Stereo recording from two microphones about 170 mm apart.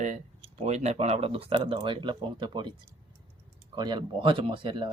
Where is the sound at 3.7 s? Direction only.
25° right (ahead or behind).